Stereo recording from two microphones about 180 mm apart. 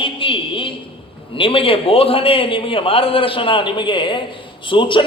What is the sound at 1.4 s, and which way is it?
A man's voice, 30° left (ahead or behind).